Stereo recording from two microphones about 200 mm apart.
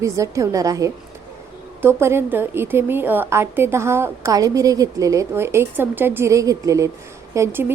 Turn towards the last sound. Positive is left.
turn(degrees=-10)  # may be behind; listen again after turning